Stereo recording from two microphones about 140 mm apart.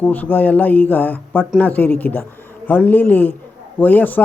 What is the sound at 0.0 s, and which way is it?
Speech, 10° left (ahead or behind).